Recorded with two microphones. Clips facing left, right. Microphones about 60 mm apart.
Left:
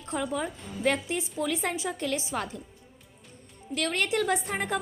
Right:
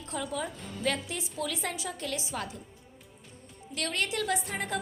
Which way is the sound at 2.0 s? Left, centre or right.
Left.